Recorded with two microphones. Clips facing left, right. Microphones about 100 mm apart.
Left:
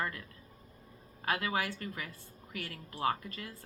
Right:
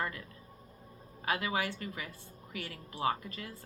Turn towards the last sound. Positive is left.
turn(degrees=-25)  # may be behind; listen again after turning